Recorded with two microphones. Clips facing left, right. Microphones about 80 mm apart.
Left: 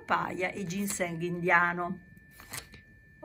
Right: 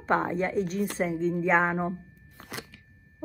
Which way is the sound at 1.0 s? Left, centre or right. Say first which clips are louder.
Right 7 dB; right.